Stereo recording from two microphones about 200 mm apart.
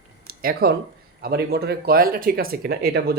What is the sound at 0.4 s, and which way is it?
Speech, 50° right (ahead or behind).